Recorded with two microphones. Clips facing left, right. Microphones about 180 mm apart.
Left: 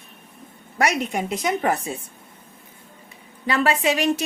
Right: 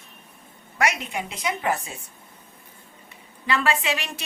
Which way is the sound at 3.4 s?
40° left (ahead or behind).